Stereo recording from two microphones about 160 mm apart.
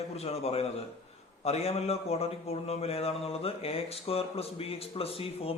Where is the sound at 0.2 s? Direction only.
40° left (ahead or behind).